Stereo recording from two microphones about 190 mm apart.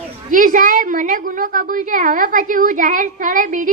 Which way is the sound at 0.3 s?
45° right (ahead or behind).